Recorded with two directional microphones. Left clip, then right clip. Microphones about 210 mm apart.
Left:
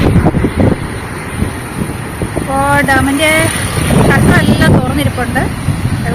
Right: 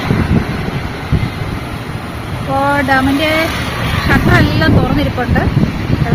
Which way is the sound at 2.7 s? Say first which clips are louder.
Left 2 dB; centre (ahead or behind).